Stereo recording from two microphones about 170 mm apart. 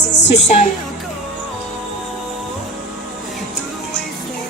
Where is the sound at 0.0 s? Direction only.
90° left.